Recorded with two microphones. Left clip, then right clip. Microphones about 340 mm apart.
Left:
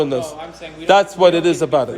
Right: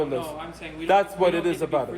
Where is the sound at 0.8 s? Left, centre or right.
Left.